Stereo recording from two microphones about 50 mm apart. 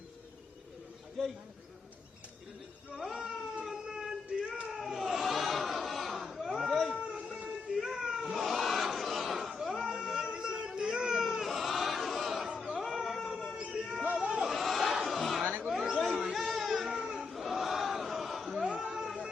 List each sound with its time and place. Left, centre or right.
2.9 s a sound: centre
6.9 s a sound: centre
7.8 s baby cry: centre
8.3 s battle cry: centre
12.7 s music: centre
13.2 s a sound: centre
14.0 s hubbub: right
14.4 s crowd: centre
15.6 s chatter: centre
16.3 s music: centre
16.9 s baby cry: centre
17.2 s battle cry: centre
18.6 s a sound: centre